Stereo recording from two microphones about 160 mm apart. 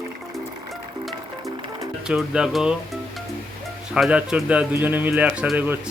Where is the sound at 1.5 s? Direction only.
30° right (ahead or behind).